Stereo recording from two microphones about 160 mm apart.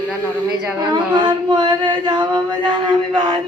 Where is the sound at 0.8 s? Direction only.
25° right (ahead or behind).